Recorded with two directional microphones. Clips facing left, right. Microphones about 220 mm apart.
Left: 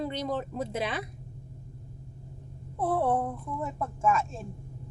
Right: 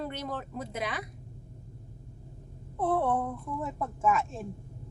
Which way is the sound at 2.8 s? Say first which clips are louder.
Left 1 dB; 10° left (ahead or behind).